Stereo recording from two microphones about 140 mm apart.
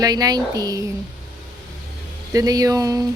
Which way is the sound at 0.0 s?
25° right (ahead or behind).